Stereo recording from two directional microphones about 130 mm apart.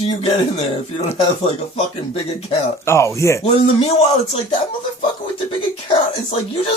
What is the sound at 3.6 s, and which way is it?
Speech, 45° left (ahead or behind).